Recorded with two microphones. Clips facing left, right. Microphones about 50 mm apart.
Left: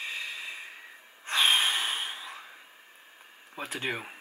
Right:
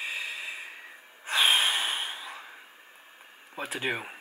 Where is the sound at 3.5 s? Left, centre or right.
Centre.